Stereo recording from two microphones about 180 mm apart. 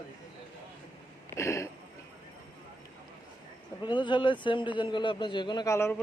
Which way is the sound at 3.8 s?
25° left (ahead or behind).